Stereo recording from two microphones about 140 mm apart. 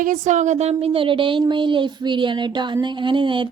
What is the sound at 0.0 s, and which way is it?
Speech, 65° right (ahead or behind).